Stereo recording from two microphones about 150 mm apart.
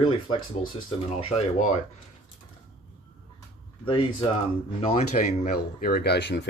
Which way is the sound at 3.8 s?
35° left (ahead or behind).